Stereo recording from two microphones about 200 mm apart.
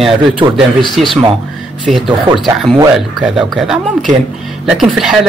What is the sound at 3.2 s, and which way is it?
A man's voice, centre (ahead or behind).